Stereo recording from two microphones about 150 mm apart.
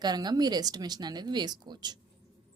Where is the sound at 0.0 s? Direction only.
25° right (ahead or behind).